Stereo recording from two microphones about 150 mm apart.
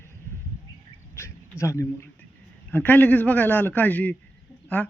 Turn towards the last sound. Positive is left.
turn(degrees=10)  # may be behind; listen again after turning